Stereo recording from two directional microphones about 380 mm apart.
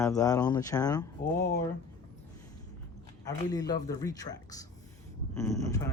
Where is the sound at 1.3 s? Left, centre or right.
Left.